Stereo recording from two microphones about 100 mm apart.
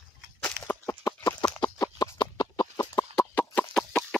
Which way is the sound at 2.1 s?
50° left (ahead or behind).